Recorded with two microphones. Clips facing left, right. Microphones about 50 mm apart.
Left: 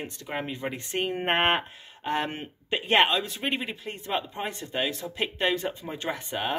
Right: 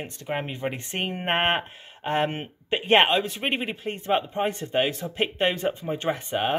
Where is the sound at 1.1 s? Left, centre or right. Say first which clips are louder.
Even; centre.